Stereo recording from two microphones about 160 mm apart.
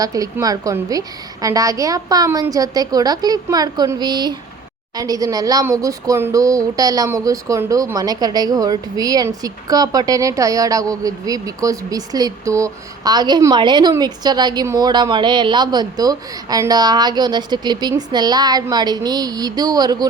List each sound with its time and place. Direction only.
0.0 s speech: 20° right (ahead or behind)